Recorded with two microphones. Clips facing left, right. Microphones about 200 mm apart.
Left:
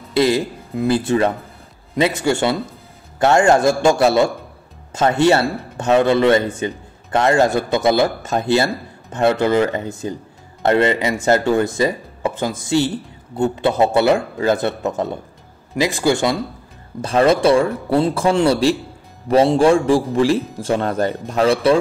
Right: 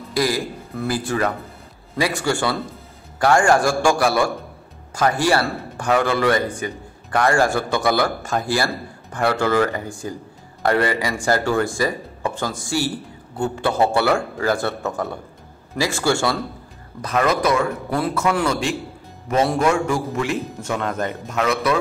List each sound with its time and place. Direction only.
0.1 s a man's voice: 25° left (ahead or behind)
17.0 s a man's voice: 30° left (ahead or behind)